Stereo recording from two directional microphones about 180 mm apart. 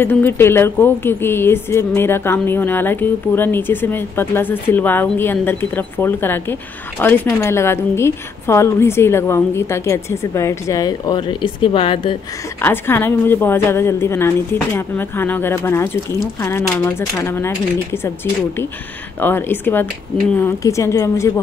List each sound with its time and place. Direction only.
0.0 s a woman's voice: 10° left (ahead or behind); by 12.2 s 30° left (ahead or behind)
12.6 s a woman's voice: 10° left (ahead or behind)